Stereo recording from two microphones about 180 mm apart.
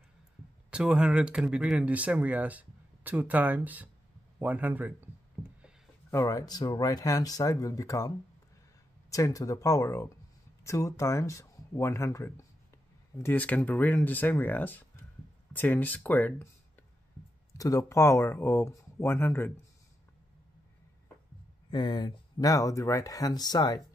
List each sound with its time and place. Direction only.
0.7 s speech: 5° right (ahead or behind)
5.4 s a sound: centre (ahead or behind)
6.0 s speech: 15° left (ahead or behind)
9.1 s speech: 20° left (ahead or behind)
17.6 s speech: 20° left (ahead or behind)
21.6 s speech: 25° left (ahead or behind)